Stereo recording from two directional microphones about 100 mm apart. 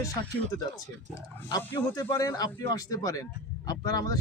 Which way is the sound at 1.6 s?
35° left (ahead or behind).